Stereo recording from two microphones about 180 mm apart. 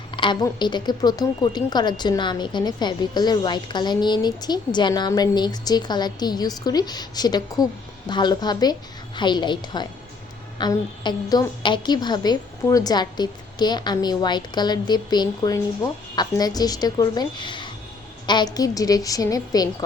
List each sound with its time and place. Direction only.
0.1 s speech: 25° left (ahead or behind)